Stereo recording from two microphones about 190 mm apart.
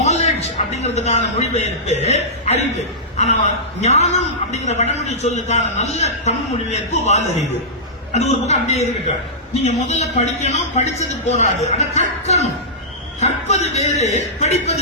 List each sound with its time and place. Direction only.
0.0 s a man's voice: 35° left (ahead or behind)